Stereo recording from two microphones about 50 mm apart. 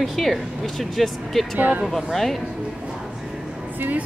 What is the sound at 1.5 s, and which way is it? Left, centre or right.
Speech, right.